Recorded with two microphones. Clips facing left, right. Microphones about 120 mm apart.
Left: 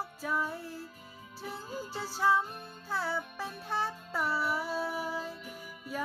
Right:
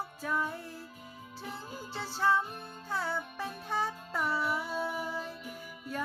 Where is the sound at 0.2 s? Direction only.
5° left (ahead or behind).